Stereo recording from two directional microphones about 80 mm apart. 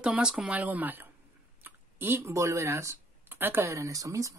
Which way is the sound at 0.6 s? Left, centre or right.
Right.